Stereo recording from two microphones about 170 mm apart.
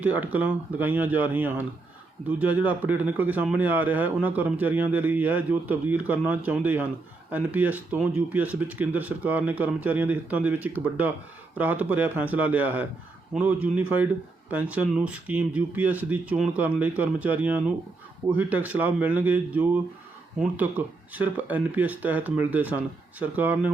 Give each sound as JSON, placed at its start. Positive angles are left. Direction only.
{"t": 0.0, "sound": "speech", "side_deg": -10}